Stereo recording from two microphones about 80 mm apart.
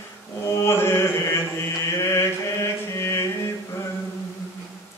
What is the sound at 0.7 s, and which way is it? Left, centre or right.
Mantra, left.